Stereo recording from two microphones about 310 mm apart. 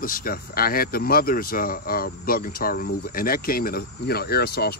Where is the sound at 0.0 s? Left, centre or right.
Left.